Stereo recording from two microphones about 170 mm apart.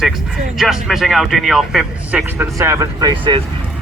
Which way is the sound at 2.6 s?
20° right (ahead or behind).